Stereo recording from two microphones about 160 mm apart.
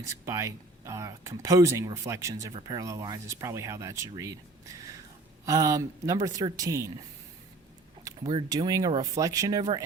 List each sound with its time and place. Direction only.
0.3 s speech: 20° right (ahead or behind)
2.5 s speech: 30° right (ahead or behind)
8.2 s speech: 30° right (ahead or behind)